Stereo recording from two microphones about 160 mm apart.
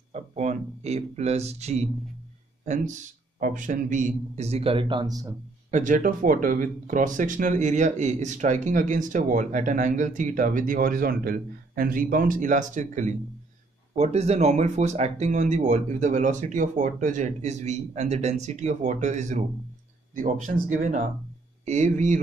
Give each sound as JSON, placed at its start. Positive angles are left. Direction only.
{"t": 0.1, "sound": "speech", "side_deg": -45}
{"t": 5.7, "sound": "speech", "side_deg": -50}